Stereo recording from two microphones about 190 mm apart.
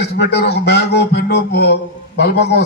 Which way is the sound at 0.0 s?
60° left (ahead or behind).